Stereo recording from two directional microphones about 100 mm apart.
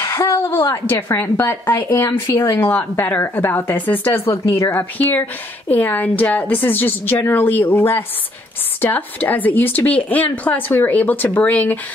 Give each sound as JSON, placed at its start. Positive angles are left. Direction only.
{"t": 0.0, "sound": "a woman's voice", "side_deg": 30}